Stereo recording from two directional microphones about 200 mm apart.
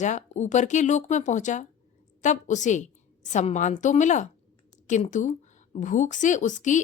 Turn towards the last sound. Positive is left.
turn(degrees=40)  # may be behind; listen again after turning